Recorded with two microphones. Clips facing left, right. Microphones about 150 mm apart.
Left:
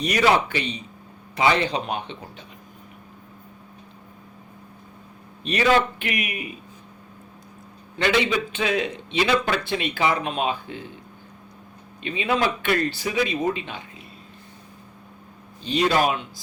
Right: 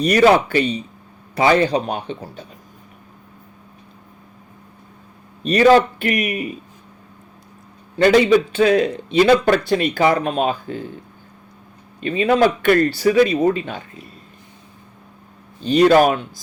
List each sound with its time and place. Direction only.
0.0 s a man's voice: 40° right (ahead or behind)
5.4 s a man's voice: 40° right (ahead or behind)
7.9 s a man's voice: 40° right (ahead or behind)
11.9 s speech: 45° right (ahead or behind)
15.6 s speech: 50° right (ahead or behind)